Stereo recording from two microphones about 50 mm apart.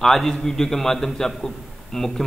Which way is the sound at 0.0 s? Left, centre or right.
Centre.